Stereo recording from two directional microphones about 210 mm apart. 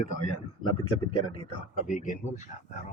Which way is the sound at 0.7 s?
90° left.